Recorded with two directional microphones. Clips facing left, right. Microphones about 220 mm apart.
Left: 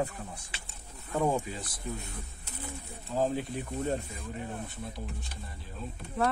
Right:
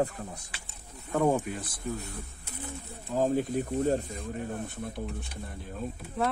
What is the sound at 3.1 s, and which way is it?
Speech, 45° right (ahead or behind).